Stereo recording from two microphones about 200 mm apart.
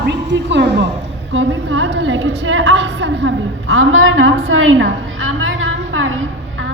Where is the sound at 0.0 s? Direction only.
60° right (ahead or behind).